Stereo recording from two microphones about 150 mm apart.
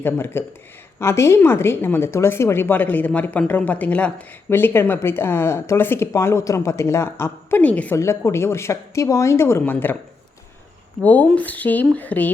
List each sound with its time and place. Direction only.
0.0 s speech: 15° left (ahead or behind)
11.0 s speech: 10° left (ahead or behind)